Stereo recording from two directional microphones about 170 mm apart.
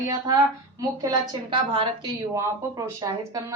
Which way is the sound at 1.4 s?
30° right (ahead or behind).